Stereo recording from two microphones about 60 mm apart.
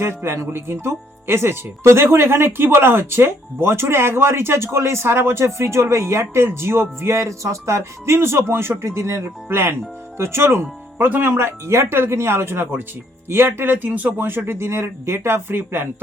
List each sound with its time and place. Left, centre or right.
0.2 s speech: right
14.2 s speech: right